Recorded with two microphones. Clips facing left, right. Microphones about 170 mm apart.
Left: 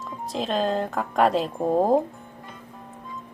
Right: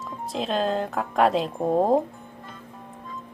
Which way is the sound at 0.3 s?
Centre (ahead or behind).